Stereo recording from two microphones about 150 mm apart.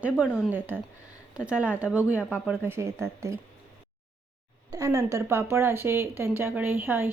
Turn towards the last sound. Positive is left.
turn(degrees=-15)  # may be behind; listen again after turning